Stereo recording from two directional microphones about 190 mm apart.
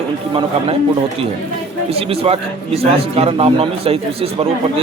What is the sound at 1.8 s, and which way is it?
A man's voice, 30° right (ahead or behind).